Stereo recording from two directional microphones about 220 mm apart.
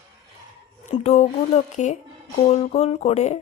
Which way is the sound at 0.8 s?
30° left (ahead or behind).